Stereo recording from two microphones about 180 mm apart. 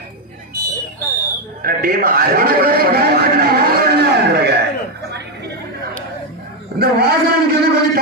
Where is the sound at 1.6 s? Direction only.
55° right (ahead or behind).